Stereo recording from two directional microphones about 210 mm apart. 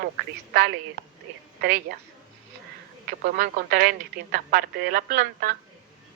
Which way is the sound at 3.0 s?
40° right (ahead or behind).